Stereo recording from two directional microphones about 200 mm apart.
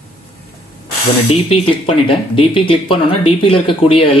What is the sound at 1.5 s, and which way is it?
Speech, 25° left (ahead or behind).